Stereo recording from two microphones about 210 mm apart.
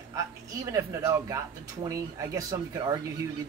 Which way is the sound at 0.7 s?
15° right (ahead or behind).